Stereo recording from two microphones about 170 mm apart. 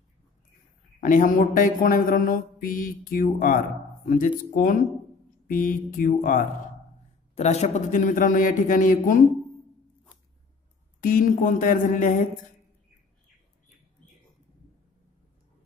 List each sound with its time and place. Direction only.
1.0 s mantra: 50° left (ahead or behind)
7.3 s mantra: 40° left (ahead or behind)
11.0 s mantra: 55° left (ahead or behind)